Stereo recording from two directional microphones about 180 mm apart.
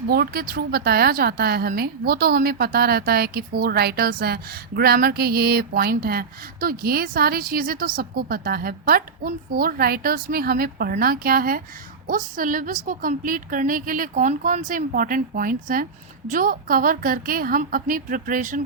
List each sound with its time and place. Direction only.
0.1 s a woman's voice: 55° right (ahead or behind)